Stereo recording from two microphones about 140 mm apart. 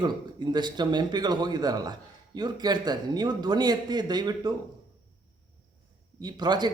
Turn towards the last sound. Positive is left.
turn(degrees=-30)  # may be behind; listen again after turning